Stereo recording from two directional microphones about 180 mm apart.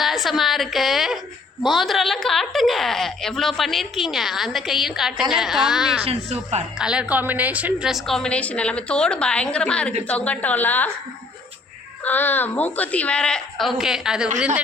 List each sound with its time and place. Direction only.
0.0 s a woman's voice: centre (ahead or behind)
6.1 s a woman's voice: 35° right (ahead or behind)
6.7 s a woman's voice: 5° right (ahead or behind)
12.0 s a woman's voice: 10° left (ahead or behind)